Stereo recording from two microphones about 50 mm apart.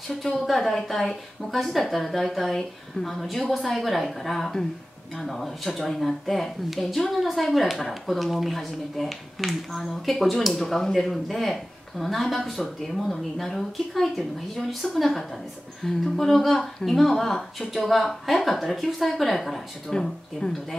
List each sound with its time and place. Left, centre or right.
0.1 s a woman's voice: centre
19.9 s speech: centre